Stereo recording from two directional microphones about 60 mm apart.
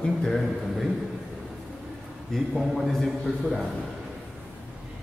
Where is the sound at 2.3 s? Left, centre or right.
Centre.